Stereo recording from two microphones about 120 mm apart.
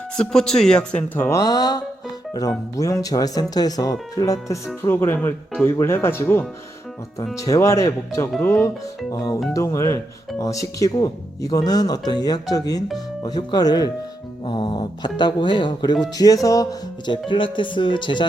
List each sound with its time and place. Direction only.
0.2 s speech: 5° left (ahead or behind); by 8.7 s 20° left (ahead or behind)
9.1 s speech: 35° left (ahead or behind)
17.1 s speech: 45° left (ahead or behind)